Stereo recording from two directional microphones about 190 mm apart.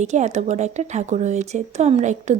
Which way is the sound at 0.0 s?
35° right (ahead or behind).